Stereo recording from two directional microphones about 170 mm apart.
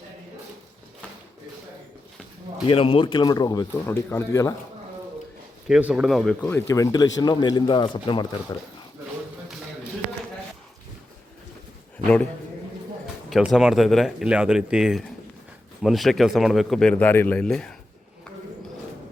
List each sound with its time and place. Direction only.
2.6 s speech: 35° left (ahead or behind); by 4.5 s 15° left (ahead or behind)
5.6 s a man's voice: 5° right (ahead or behind)
6.5 s speech: 15° left (ahead or behind)
13.3 s a man's voice: centre (ahead or behind)